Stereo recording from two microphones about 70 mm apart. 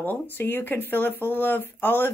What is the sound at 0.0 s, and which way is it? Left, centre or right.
A woman's voice, left.